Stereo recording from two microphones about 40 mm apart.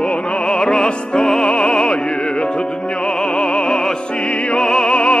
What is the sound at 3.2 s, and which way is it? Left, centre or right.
Opera, left.